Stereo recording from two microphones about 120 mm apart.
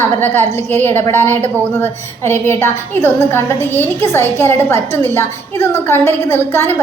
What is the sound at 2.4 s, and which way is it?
A woman's voice, 20° left (ahead or behind).